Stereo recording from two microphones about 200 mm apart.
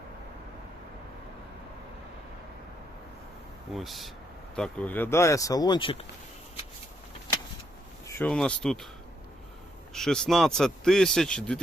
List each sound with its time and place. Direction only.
3.8 s a man's voice: centre (ahead or behind); by 6.1 s 25° left (ahead or behind)
8.0 s speech: 5° left (ahead or behind)
9.9 s a man's voice: centre (ahead or behind)